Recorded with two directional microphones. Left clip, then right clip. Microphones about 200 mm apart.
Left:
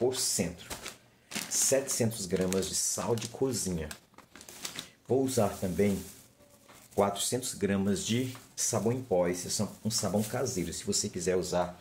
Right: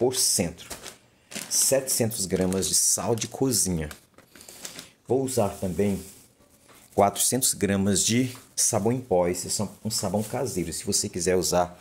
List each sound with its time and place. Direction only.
0.0 s speech: 55° right (ahead or behind)
1.7 s speech: 45° right (ahead or behind)
5.0 s speech: 35° right (ahead or behind)
7.0 s speech: 55° right (ahead or behind)
9.5 s speech: 30° right (ahead or behind); by 11.7 s 55° right (ahead or behind)